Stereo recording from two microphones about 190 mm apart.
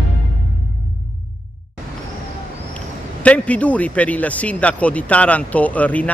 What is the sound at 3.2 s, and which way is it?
Speech, 5° left (ahead or behind).